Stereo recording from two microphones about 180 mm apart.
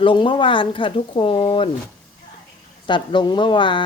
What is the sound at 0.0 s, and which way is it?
Speech, 25° left (ahead or behind).